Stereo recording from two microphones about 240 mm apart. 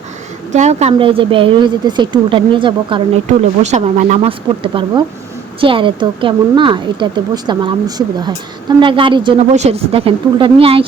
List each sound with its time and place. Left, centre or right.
0.5 s a woman's voice: right